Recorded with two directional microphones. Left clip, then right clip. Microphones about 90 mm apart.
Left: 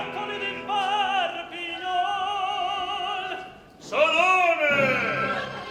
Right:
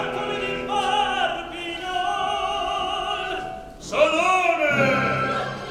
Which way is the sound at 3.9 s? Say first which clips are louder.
Right 1 dB; 35° right (ahead or behind).